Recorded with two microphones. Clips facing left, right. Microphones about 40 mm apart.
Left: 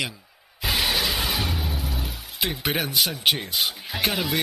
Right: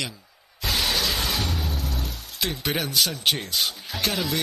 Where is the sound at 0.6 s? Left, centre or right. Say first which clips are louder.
Left 1 dB; centre.